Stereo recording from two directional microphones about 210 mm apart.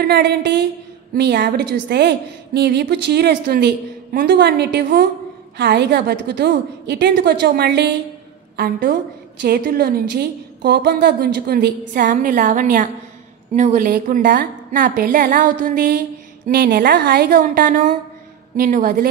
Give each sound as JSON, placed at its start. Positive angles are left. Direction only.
{"t": 0.0, "sound": "a woman's voice", "side_deg": -50}